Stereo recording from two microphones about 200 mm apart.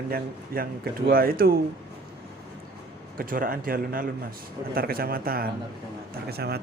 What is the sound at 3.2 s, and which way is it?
Speech, 45° right (ahead or behind).